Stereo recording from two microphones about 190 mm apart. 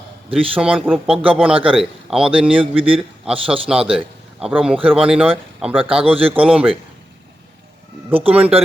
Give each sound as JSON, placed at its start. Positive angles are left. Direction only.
{"t": 0.5, "sound": "speech", "side_deg": -5}
{"t": 2.7, "sound": "a man's voice", "side_deg": -30}
{"t": 3.3, "sound": "speech", "side_deg": -5}
{"t": 8.3, "sound": "speech", "side_deg": -5}